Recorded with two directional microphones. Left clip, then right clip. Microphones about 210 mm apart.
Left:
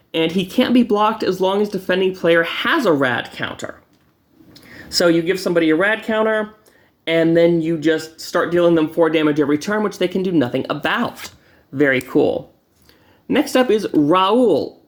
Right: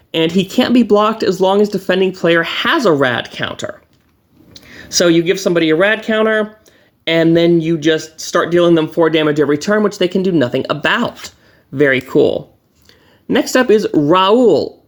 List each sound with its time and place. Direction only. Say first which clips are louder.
0.5 s speech: right 5 dB; 35° right (ahead or behind)
13.5 s speech: right 5 dB; 35° right (ahead or behind)